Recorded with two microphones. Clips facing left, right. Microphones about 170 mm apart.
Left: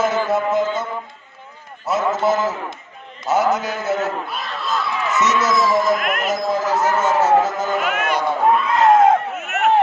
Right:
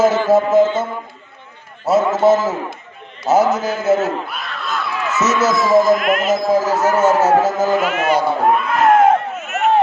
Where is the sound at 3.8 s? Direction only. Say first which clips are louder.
Right 6 dB; 25° right (ahead or behind).